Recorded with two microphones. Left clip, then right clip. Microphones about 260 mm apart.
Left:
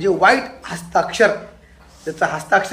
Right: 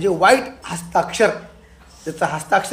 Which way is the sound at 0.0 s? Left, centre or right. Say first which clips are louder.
Even; right.